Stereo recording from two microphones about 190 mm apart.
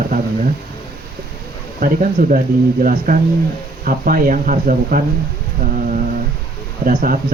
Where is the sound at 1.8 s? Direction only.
50° right (ahead or behind).